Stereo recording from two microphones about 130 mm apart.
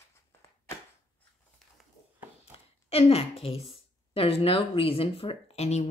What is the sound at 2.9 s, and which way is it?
A woman's voice, 50° left (ahead or behind).